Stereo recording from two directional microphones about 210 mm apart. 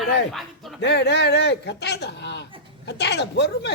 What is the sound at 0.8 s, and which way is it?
A woman's voice, 55° left (ahead or behind).